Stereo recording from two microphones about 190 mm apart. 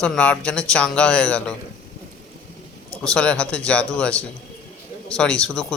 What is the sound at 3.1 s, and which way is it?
Speech, 5° left (ahead or behind).